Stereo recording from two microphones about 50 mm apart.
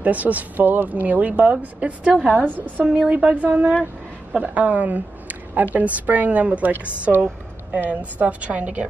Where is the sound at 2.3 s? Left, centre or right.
Right.